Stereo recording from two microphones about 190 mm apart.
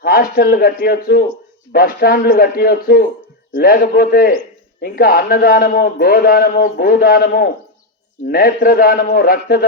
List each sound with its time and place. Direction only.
0.0 s a man's voice: 50° left (ahead or behind)